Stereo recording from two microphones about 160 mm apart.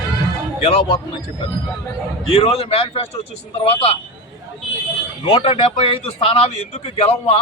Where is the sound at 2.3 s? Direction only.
40° left (ahead or behind).